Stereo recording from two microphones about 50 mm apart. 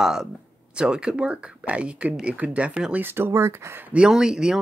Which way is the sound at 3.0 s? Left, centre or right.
Right.